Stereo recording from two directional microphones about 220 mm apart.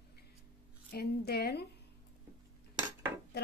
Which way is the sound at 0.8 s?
45° left (ahead or behind).